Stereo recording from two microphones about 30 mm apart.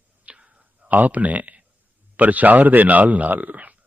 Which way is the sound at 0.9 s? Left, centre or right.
Right.